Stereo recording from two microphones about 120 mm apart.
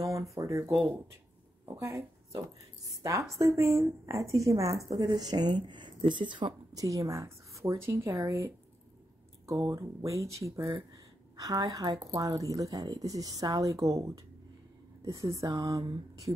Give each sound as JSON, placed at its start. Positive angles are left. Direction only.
{"t": 0.0, "sound": "speech", "side_deg": -25}
{"t": 1.8, "sound": "a woman's voice", "side_deg": -25}